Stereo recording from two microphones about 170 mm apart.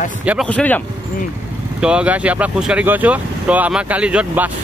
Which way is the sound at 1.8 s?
5° right (ahead or behind).